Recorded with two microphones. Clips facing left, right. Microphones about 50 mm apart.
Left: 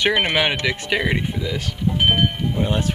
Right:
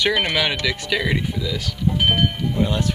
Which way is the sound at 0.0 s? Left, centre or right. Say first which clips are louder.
Left 1 dB; left.